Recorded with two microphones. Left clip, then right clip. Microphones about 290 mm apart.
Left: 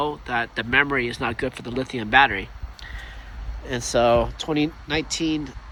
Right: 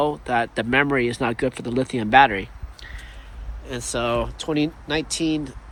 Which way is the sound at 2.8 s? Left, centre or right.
Left.